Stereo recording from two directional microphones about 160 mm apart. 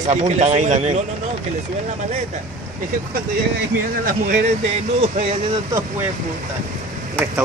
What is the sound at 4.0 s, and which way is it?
Speech, 60° right (ahead or behind).